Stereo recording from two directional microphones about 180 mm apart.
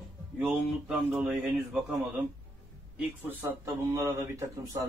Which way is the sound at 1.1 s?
15° right (ahead or behind).